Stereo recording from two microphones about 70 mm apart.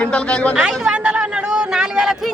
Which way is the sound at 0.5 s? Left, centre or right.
Centre.